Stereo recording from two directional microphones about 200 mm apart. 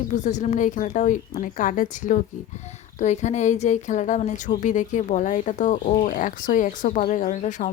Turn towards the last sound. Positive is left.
turn(degrees=35)  # may be behind; listen again after turning